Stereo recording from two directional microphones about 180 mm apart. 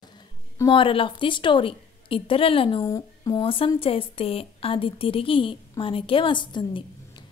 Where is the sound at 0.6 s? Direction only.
25° left (ahead or behind).